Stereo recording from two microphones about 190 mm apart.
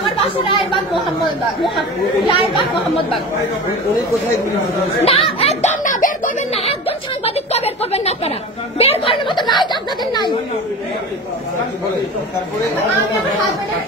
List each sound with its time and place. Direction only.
0.2 s speech: 30° left (ahead or behind)
2.2 s speech: 25° left (ahead or behind)
5.0 s speech: 30° left (ahead or behind)
6.6 s a sound: 30° left (ahead or behind)
8.7 s speech: 30° left (ahead or behind)